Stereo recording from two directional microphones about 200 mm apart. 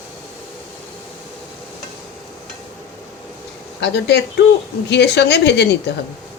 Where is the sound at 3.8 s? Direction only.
55° left (ahead or behind).